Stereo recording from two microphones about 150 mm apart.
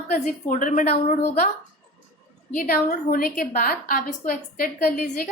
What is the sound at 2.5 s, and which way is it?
A woman's voice, 70° left (ahead or behind).